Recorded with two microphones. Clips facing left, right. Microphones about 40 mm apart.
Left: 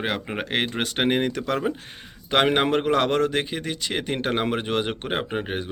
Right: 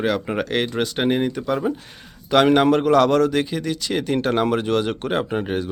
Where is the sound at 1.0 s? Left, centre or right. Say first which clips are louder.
Right 1 dB; left.